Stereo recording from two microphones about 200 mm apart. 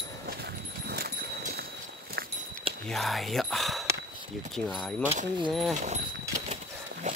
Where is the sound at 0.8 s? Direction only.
50° right (ahead or behind).